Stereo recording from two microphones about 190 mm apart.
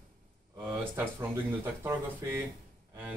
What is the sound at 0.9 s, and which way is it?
Speech, 10° right (ahead or behind).